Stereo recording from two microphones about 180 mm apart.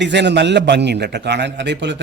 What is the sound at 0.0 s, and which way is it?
A man's voice, 75° right (ahead or behind).